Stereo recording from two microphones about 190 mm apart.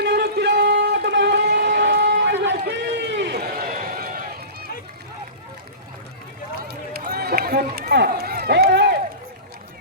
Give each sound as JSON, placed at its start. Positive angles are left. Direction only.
{"t": 0.0, "sound": "a sound", "side_deg": -60}
{"t": 2.0, "sound": "run", "side_deg": -60}
{"t": 6.7, "sound": "run", "side_deg": -55}